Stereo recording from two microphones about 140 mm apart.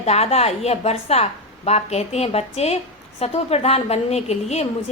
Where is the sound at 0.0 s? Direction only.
50° left (ahead or behind).